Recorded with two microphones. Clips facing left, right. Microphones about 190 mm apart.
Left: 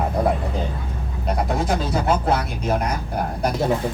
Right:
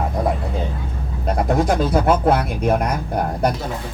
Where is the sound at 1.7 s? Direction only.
55° right (ahead or behind).